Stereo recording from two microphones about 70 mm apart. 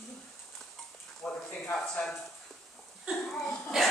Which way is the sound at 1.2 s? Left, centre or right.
Left.